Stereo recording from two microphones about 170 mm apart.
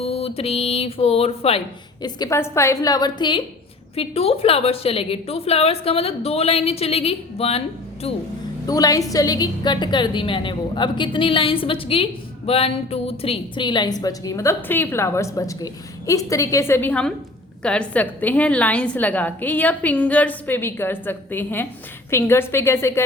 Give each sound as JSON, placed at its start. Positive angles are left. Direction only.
{"t": 0.0, "sound": "a woman's voice", "side_deg": 35}
{"t": 8.6, "sound": "a woman's voice", "side_deg": 20}